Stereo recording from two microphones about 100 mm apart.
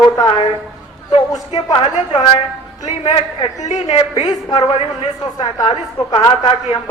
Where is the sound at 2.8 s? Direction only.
75° left (ahead or behind).